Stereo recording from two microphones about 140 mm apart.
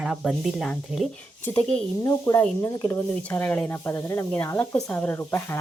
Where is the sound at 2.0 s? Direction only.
20° left (ahead or behind).